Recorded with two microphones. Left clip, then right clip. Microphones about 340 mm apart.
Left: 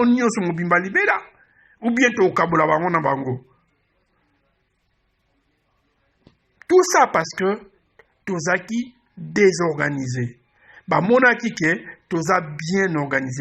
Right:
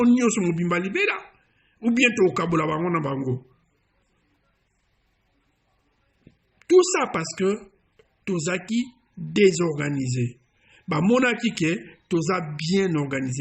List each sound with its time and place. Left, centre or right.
0.0 s a man's voice: centre
6.7 s a man's voice: centre